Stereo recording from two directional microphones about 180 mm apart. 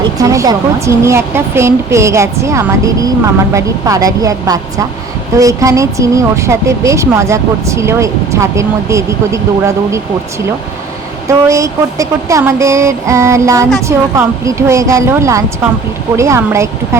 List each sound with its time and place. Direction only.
0.2 s speech: 20° right (ahead or behind)
11.3 s speech: 15° right (ahead or behind)